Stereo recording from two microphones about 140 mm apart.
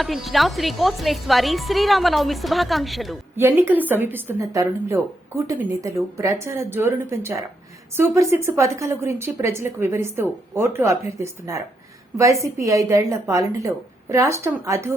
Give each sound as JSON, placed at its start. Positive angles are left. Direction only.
{"t": 0.0, "sound": "a woman's voice", "side_deg": 0}
{"t": 3.3, "sound": "a woman's voice", "side_deg": -15}